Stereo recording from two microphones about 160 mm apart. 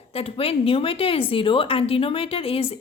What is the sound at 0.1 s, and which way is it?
A woman's voice, 35° left (ahead or behind).